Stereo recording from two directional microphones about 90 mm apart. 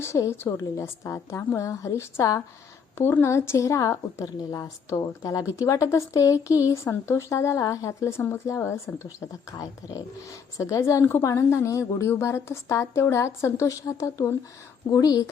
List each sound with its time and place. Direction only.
0.0 s speech: 30° left (ahead or behind)
3.0 s a woman's voice: 25° left (ahead or behind); by 15.3 s 45° left (ahead or behind)